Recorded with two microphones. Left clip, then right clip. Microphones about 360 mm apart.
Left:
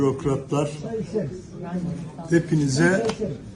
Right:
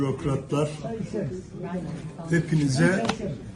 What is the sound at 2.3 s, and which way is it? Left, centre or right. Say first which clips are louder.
Speech: left 4 dB; centre.